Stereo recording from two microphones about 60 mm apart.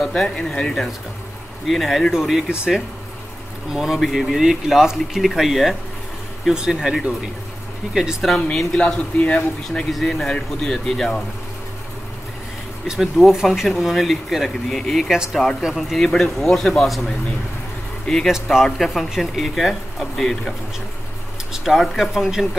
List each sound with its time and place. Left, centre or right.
0.2 s speech: centre
1.7 s speech: centre
3.7 s speech: centre
8.2 s speech: centre
9.8 s speech: centre
12.8 s speech: centre
18.0 s speech: centre
18.3 s speech: centre